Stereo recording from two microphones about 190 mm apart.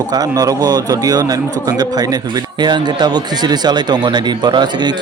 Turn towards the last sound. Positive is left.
turn(degrees=-20)  # may be behind; listen again after turning